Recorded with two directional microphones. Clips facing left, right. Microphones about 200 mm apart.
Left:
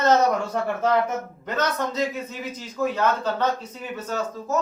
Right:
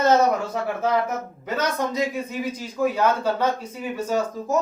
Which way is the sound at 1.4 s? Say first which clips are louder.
Right 1 dB; 10° right (ahead or behind).